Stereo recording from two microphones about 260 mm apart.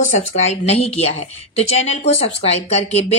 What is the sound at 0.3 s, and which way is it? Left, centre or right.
A woman's voice, left.